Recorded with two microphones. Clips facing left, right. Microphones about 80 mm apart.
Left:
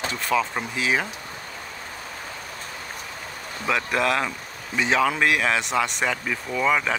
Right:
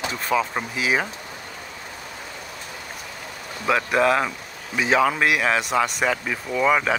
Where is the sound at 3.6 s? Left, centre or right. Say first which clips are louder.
Right 4 dB; centre.